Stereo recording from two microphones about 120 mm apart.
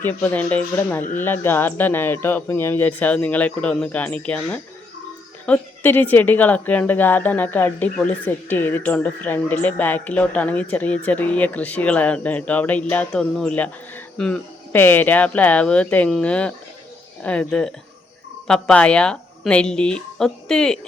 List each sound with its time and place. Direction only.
0.0 s speech: 15° left (ahead or behind)